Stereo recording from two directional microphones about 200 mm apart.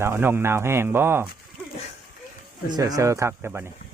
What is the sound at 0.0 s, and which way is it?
Speech, 10° right (ahead or behind).